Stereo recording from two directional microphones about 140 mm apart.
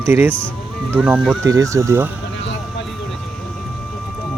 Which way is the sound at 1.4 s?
25° right (ahead or behind).